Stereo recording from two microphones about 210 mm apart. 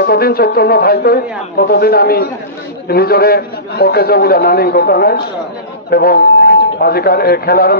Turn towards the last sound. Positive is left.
turn(degrees=45)  # may be behind; listen again after turning